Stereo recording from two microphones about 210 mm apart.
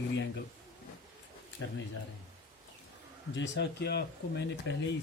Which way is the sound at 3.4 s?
55° left (ahead or behind).